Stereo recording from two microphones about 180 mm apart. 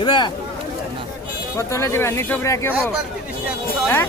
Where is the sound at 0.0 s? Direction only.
25° left (ahead or behind).